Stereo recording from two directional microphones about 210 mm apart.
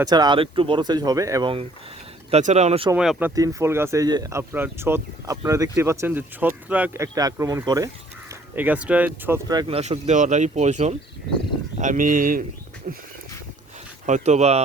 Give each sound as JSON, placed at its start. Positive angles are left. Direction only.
{"t": 0.0, "sound": "speech", "side_deg": -20}
{"t": 2.3, "sound": "speech", "side_deg": -30}
{"t": 2.9, "sound": "speech", "side_deg": -5}
{"t": 14.1, "sound": "speech", "side_deg": -30}